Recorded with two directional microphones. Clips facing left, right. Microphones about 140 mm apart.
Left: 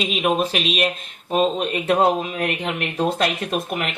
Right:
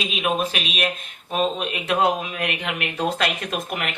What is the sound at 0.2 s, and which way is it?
Speech, 35° left (ahead or behind).